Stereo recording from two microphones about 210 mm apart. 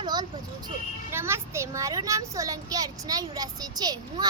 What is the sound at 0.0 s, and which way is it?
Vehicle, 20° right (ahead or behind).